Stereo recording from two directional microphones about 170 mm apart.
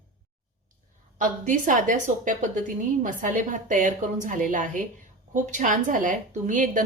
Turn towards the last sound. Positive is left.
turn(degrees=-50)  # may be behind; listen again after turning